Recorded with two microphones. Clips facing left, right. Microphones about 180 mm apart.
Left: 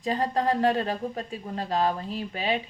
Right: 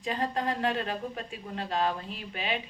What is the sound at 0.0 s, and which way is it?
Speech, 35° left (ahead or behind).